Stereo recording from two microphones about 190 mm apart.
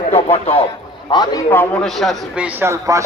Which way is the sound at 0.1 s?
30° left (ahead or behind).